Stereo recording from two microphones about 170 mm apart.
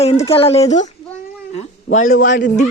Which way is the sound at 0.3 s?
35° left (ahead or behind).